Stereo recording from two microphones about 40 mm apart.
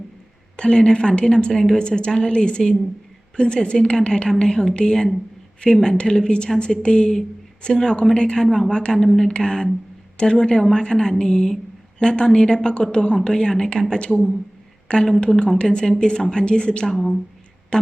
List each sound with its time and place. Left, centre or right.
0.5 s a woman's voice: left
4.7 s a woman's voice: left
4.9 s a woman's voice: centre
5.8 s a woman's voice: centre
8.4 s a woman's voice: centre
8.7 s a woman's voice: left
9.0 s a woman's voice: centre; by 16.8 s left
16.8 s a woman's voice: centre